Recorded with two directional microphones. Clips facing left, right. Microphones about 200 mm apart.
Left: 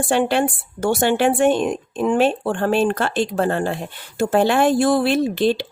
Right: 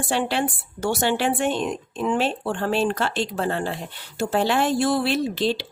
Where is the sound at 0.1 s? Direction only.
50° left (ahead or behind).